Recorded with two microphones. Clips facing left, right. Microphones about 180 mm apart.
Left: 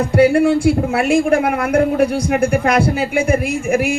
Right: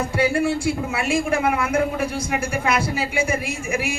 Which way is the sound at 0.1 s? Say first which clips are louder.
Left 11 dB; 60° left (ahead or behind).